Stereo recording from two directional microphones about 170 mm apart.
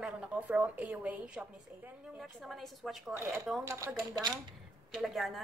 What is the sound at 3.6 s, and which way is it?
Speech, 15° right (ahead or behind).